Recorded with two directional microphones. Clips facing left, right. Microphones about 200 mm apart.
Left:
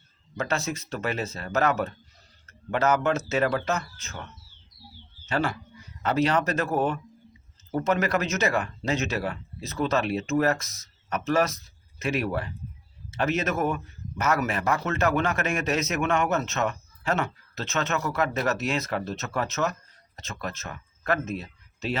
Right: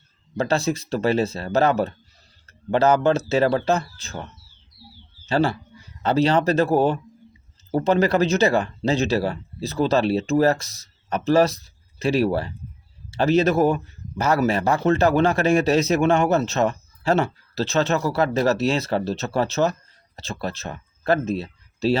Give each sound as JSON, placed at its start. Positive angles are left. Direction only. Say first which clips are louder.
{"t": 0.3, "sound": "a man's voice", "louder": "right 7 dB", "side_deg": -30}